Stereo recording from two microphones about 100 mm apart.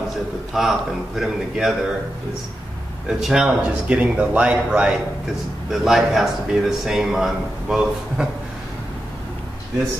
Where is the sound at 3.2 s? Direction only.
5° right (ahead or behind).